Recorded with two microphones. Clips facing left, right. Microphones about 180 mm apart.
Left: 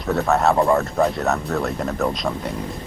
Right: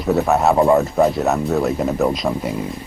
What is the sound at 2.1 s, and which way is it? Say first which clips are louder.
Speech: right 4 dB; centre (ahead or behind).